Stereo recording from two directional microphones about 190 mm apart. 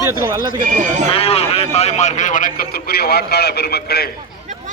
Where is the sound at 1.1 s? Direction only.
30° left (ahead or behind); by 4.0 s 55° left (ahead or behind).